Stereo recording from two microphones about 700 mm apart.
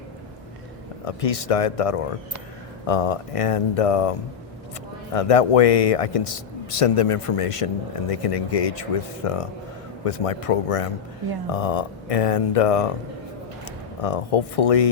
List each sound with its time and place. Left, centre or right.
1.0 s speech: left
5.1 s speech: left
14.0 s speech: left